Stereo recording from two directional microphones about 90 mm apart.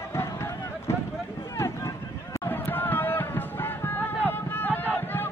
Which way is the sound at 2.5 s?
20° left (ahead or behind).